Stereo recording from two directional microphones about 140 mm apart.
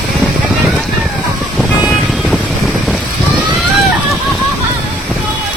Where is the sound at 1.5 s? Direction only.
5° right (ahead or behind).